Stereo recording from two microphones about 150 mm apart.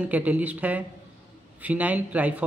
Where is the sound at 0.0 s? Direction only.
10° right (ahead or behind).